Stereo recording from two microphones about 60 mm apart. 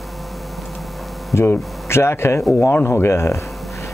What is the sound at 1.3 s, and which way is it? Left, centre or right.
Speech, left.